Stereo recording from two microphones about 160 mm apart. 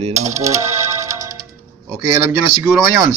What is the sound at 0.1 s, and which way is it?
Music, 20° right (ahead or behind).